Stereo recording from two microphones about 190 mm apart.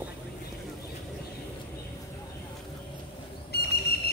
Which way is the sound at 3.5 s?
55° left (ahead or behind).